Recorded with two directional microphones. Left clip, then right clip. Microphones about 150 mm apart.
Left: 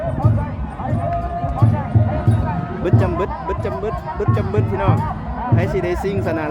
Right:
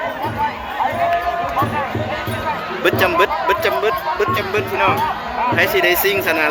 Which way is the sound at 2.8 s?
15° left (ahead or behind).